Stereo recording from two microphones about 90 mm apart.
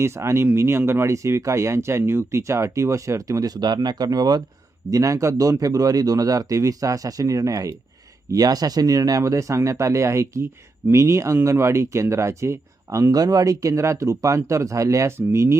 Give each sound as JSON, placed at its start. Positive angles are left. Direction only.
{"t": 0.0, "sound": "speech", "side_deg": -30}
{"t": 4.9, "sound": "speech", "side_deg": -40}